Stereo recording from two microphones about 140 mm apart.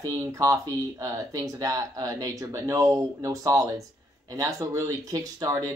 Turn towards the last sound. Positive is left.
turn(degrees=-25)  # may be behind; listen again after turning